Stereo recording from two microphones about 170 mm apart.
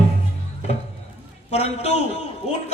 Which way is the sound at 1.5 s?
40° left (ahead or behind).